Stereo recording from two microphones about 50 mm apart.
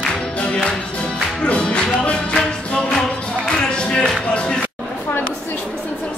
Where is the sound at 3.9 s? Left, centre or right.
Centre.